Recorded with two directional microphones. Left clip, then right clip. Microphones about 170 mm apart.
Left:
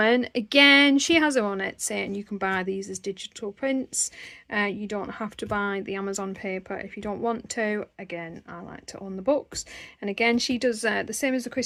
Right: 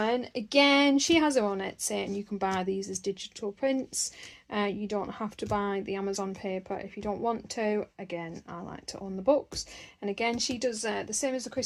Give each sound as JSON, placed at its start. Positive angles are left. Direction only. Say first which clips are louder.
{"t": 0.0, "sound": "a woman's voice", "louder": "left 7 dB", "side_deg": 45}